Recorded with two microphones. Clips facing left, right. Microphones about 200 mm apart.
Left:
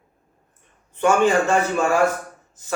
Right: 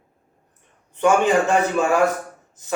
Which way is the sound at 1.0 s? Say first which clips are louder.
Even; 15° right (ahead or behind).